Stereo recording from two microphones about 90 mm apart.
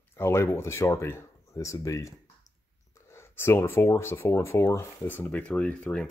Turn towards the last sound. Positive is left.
turn(degrees=10)  # may be behind; listen again after turning